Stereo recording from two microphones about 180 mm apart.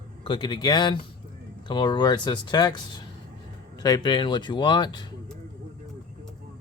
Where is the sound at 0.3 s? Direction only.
25° left (ahead or behind).